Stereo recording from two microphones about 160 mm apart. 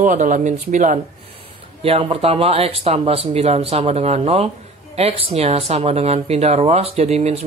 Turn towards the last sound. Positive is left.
turn(degrees=-40)  # may be behind; listen again after turning